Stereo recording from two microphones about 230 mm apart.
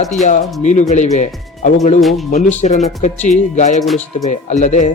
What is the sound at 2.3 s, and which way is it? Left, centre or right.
Speech, left.